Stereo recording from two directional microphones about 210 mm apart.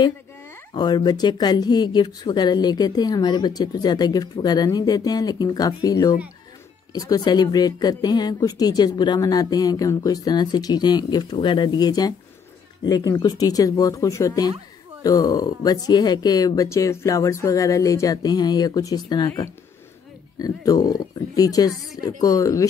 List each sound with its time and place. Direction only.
0.7 s speech: 20° left (ahead or behind)